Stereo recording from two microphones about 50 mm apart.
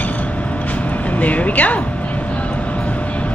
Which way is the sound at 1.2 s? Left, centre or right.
Left.